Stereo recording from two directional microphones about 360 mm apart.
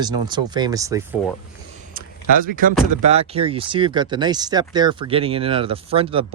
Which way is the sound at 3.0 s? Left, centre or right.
Centre.